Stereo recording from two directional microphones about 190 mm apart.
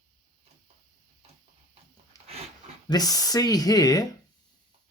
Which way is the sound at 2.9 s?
20° left (ahead or behind).